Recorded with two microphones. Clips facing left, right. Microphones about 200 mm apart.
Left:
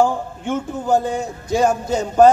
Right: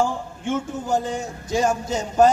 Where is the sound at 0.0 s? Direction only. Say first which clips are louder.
Left 5 dB; 60° left (ahead or behind).